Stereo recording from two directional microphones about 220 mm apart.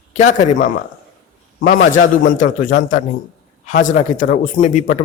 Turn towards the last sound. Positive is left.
turn(degrees=35)  # may be behind; listen again after turning